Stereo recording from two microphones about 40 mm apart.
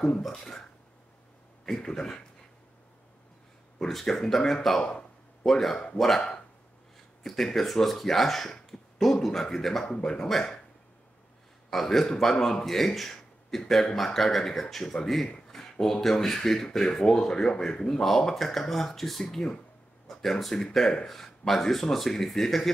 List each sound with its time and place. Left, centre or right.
0.2 s speech: centre
1.7 s speech: centre
4.0 s speech: centre
7.2 s speech: centre
11.7 s speech: centre
15.2 s a sound: left
15.7 s speech: centre